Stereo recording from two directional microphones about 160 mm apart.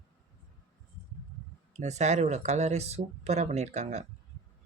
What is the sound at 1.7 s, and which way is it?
Speech, 45° right (ahead or behind).